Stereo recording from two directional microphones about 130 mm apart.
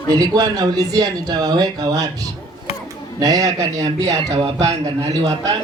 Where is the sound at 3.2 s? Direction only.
25° right (ahead or behind).